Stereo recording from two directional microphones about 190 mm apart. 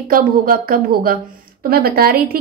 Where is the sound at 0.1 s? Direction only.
50° right (ahead or behind).